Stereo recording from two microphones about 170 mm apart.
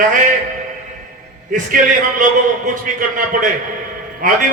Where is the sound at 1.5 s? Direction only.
50° right (ahead or behind).